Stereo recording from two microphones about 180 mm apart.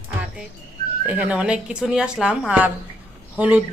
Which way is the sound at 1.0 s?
10° right (ahead or behind).